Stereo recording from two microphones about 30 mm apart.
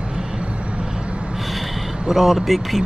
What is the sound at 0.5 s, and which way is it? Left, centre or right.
Vehicle, right.